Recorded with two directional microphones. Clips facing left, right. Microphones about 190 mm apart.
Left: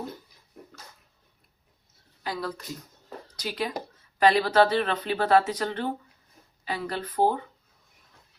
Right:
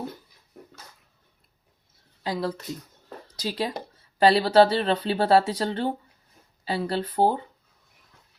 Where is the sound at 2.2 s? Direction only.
25° right (ahead or behind).